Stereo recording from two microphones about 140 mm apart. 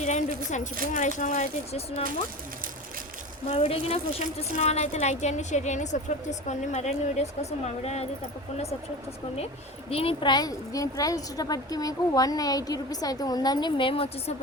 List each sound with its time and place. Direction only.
0.0 s speech: 55° left (ahead or behind)
3.4 s a woman's voice: 45° left (ahead or behind)
9.9 s a woman's voice: 40° left (ahead or behind)